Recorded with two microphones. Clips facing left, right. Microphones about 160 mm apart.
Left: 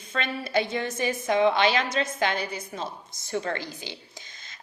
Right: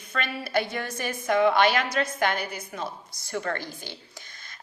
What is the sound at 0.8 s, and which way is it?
Speech, 25° left (ahead or behind).